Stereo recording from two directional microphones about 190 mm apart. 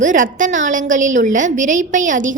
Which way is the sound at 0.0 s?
45° right (ahead or behind).